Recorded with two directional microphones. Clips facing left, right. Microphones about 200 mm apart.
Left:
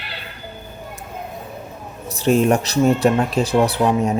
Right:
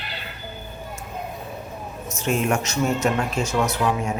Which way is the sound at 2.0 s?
35° left (ahead or behind).